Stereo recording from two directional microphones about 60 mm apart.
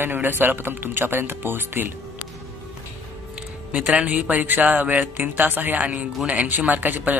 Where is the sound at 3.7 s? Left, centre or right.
Centre.